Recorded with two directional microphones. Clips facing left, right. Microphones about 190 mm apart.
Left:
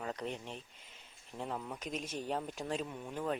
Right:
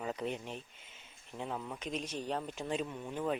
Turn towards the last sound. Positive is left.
turn(degrees=0)  # may be behind; listen again after turning